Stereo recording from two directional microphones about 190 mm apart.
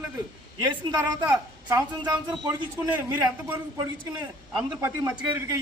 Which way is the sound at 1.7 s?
20° right (ahead or behind).